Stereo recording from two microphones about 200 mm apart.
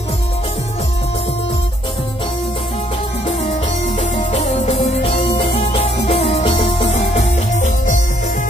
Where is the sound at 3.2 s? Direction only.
30° left (ahead or behind).